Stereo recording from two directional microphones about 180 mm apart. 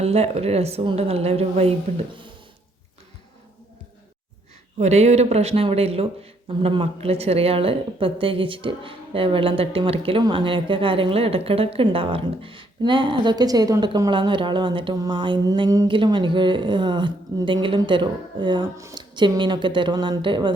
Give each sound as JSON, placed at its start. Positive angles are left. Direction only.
{"t": 0.0, "sound": "a woman's voice", "side_deg": -35}
{"t": 4.8, "sound": "a woman's voice", "side_deg": -35}